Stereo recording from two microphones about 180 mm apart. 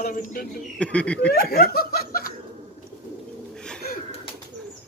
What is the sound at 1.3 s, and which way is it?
Speech, 60° left (ahead or behind).